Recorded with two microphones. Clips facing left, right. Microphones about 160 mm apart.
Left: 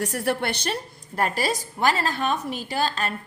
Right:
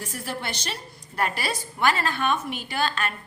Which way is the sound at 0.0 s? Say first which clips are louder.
Left 8 dB; 65° left (ahead or behind).